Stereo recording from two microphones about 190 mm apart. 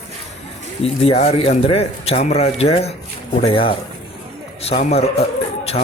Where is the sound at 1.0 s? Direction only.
30° left (ahead or behind).